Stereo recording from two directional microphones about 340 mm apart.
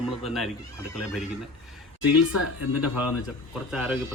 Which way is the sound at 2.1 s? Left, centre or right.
Left.